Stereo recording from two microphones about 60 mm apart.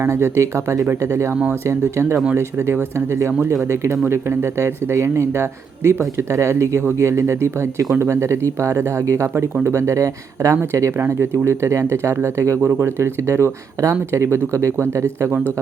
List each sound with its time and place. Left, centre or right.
0.0 s speech: right
10.6 s speech: right